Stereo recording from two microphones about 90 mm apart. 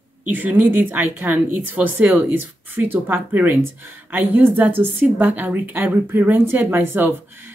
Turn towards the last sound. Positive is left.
turn(degrees=-25)  # may be behind; listen again after turning